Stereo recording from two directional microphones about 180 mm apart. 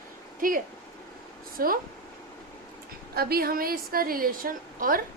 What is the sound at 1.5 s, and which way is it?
Speech, 55° right (ahead or behind).